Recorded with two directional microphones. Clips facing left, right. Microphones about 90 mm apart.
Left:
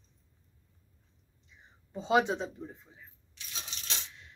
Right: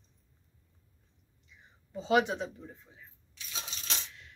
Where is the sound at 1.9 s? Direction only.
25° left (ahead or behind).